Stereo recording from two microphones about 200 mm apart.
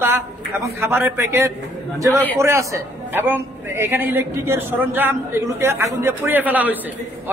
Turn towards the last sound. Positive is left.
turn(degrees=-10)  # may be behind; listen again after turning